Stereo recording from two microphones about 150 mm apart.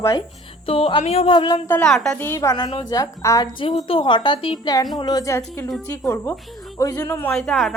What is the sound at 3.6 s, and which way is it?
A woman's voice, 40° left (ahead or behind).